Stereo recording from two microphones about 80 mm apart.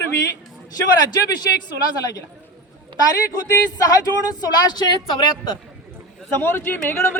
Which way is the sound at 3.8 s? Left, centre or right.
Left.